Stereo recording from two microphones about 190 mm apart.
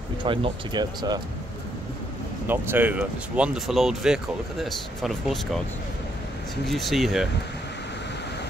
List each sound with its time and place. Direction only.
0.2 s speech: 25° right (ahead or behind)
2.4 s speech: 10° right (ahead or behind)
6.6 s speech: centre (ahead or behind)